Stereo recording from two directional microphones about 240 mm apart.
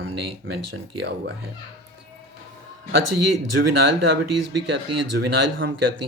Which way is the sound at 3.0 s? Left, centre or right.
Right.